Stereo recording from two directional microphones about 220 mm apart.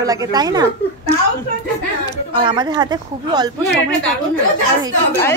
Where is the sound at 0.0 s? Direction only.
15° right (ahead or behind).